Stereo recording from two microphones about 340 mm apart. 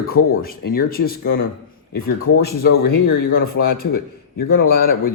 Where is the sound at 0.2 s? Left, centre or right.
Left.